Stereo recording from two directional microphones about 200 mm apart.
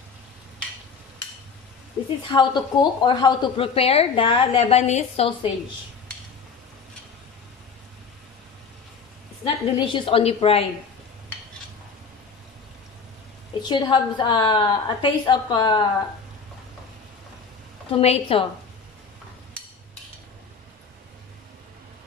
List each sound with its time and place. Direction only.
2.2 s speech: 20° left (ahead or behind)
9.4 s speech: 25° left (ahead or behind)
13.6 s speech: 20° left (ahead or behind)
17.9 s a woman's voice: 30° left (ahead or behind)